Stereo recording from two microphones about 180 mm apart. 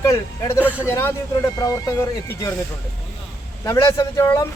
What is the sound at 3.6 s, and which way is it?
Speech, 15° left (ahead or behind).